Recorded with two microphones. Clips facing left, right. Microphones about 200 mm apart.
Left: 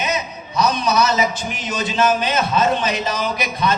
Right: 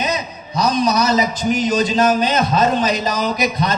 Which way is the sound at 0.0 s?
35° right (ahead or behind).